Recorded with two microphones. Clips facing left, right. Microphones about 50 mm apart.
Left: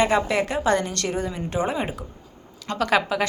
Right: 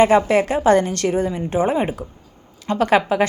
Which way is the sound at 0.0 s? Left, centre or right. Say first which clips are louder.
Right 6 dB; right.